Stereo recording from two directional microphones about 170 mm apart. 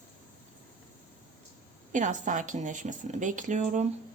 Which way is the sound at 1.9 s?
45° right (ahead or behind).